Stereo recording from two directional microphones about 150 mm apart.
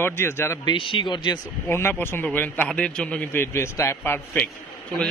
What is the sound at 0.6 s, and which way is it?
Speech, 35° left (ahead or behind).